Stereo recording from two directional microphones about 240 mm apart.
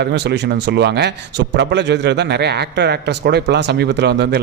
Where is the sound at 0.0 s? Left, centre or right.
Right.